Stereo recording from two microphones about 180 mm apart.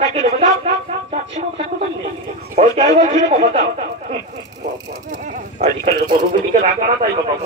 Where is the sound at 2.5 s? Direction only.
40° right (ahead or behind).